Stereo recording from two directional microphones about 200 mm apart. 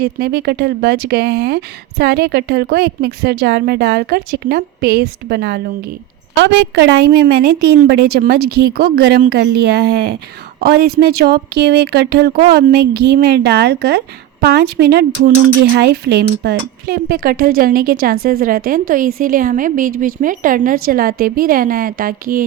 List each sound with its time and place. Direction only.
0.0 s speech: 50° right (ahead or behind)
7.0 s speech: 55° right (ahead or behind)